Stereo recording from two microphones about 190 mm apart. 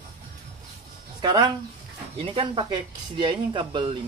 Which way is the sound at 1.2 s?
25° right (ahead or behind).